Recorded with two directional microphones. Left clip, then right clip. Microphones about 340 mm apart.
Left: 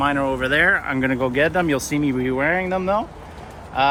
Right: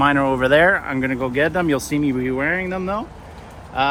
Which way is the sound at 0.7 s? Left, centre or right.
Centre.